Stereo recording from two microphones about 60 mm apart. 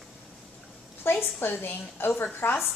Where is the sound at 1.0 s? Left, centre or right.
Left.